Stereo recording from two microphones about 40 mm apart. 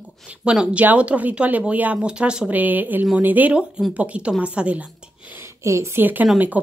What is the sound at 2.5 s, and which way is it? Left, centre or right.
Speech, right.